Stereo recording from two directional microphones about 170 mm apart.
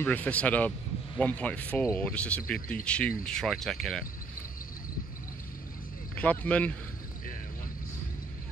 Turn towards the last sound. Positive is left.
turn(degrees=55)  # may be behind; listen again after turning